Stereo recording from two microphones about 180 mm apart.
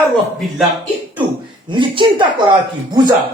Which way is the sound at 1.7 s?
25° right (ahead or behind).